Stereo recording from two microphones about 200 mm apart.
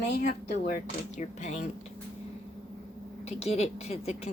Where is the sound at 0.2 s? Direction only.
45° left (ahead or behind).